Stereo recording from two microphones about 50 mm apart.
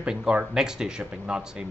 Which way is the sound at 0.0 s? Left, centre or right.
Centre.